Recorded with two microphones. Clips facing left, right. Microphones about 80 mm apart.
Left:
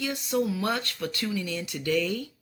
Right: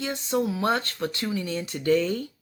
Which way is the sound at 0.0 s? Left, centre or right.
Right.